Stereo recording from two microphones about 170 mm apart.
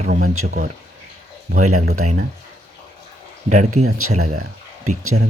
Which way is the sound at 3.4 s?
45° right (ahead or behind).